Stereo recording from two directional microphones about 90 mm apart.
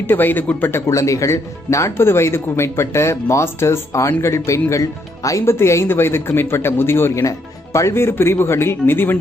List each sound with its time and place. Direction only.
0.0 s speech: 20° left (ahead or behind)